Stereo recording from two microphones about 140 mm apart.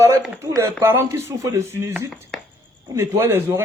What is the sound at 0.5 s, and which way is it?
A man's voice, 20° right (ahead or behind).